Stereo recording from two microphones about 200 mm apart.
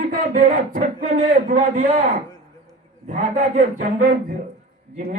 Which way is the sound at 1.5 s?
40° right (ahead or behind).